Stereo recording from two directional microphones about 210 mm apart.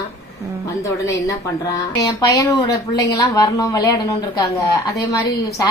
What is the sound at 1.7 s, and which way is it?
Speech, 15° left (ahead or behind).